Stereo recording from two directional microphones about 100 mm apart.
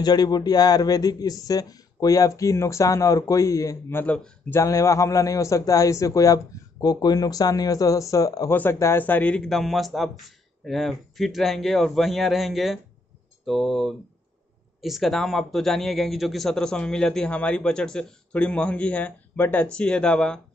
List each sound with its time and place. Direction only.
0.0 s a man's voice: 40° left (ahead or behind)
4.0 s speech: 10° left (ahead or behind)
4.5 s a man's voice: 30° left (ahead or behind)
9.4 s a man's voice: 5° left (ahead or behind)